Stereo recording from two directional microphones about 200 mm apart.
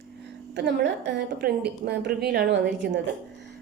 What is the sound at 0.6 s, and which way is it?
A woman's voice, 60° right (ahead or behind).